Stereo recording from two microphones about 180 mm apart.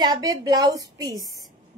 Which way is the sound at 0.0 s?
20° right (ahead or behind).